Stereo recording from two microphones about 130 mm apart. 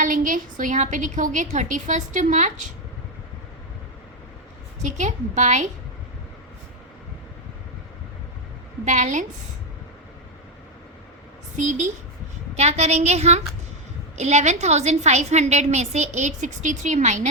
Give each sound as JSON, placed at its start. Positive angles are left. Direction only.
{"t": 0.0, "sound": "a woman's voice", "side_deg": -90}
{"t": 4.8, "sound": "a woman's voice", "side_deg": -75}
{"t": 8.8, "sound": "a woman's voice", "side_deg": -70}
{"t": 11.5, "sound": "a woman's voice", "side_deg": -70}
{"t": 12.5, "sound": "a woman's voice", "side_deg": -60}